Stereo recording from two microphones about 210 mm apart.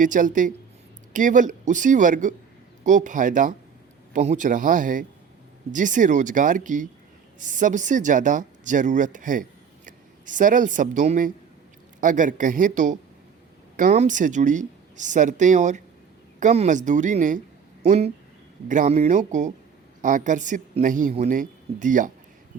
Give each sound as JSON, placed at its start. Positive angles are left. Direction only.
{"t": 0.0, "sound": "speech", "side_deg": -40}